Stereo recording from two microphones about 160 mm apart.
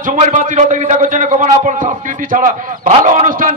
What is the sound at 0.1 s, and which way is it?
A man's voice, 50° right (ahead or behind).